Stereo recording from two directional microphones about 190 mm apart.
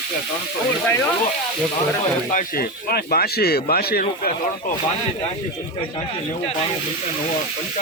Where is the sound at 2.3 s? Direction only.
45° left (ahead or behind).